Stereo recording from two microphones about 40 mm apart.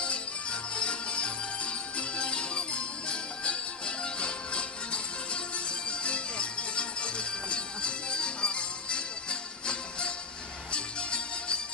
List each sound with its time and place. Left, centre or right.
0.0 s music: left